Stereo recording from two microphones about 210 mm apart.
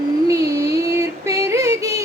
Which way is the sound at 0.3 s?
15° right (ahead or behind).